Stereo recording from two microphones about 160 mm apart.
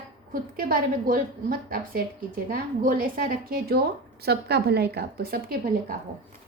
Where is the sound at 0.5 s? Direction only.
65° right (ahead or behind).